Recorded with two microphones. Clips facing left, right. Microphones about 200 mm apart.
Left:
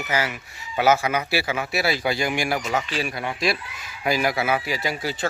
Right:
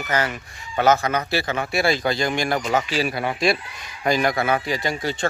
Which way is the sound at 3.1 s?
50° right (ahead or behind).